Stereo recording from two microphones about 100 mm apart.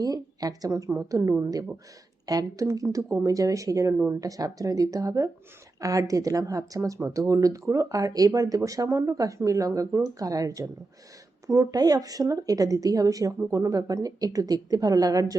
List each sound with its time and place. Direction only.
0.0 s speech: 40° right (ahead or behind)
4.2 s speech: 35° right (ahead or behind)